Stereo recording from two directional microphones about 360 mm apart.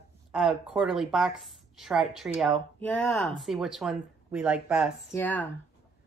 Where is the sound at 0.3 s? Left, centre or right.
Centre.